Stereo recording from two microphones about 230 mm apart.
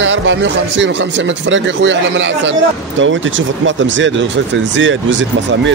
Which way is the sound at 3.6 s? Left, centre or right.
Right.